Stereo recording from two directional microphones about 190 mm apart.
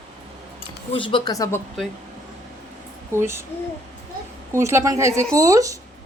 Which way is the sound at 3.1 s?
15° right (ahead or behind).